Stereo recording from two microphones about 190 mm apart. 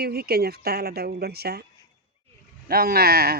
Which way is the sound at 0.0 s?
55° right (ahead or behind).